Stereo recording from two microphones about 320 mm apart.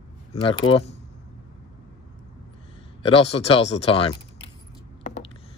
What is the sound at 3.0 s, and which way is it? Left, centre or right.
Speech, centre.